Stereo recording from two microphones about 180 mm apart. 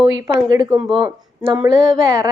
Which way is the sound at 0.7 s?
Centre (ahead or behind).